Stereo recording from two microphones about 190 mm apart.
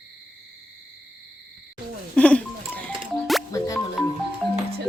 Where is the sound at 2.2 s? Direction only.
5° left (ahead or behind).